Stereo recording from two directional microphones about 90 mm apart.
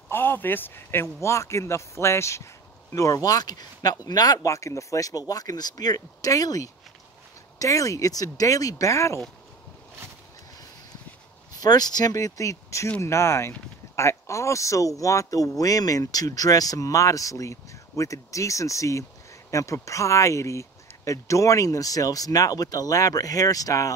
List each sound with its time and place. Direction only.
0.1 s speech: 25° left (ahead or behind)
11.6 s speech: 50° left (ahead or behind)